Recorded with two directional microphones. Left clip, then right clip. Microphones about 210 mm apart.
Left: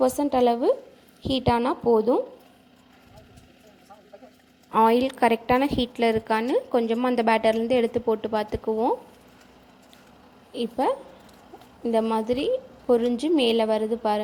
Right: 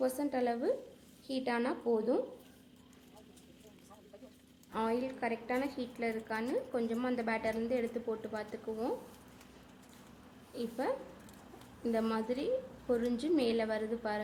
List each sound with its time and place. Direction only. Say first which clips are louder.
0.0 s a woman's voice: left 13 dB; 30° left (ahead or behind)
4.7 s a woman's voice: left 16 dB; 35° left (ahead or behind)
10.5 s a woman's voice: left 12 dB; 30° left (ahead or behind)
12.0 s a woman's voice: left 11 dB; 25° left (ahead or behind)